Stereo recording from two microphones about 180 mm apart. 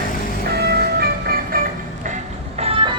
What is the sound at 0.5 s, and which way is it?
Music, 60° right (ahead or behind).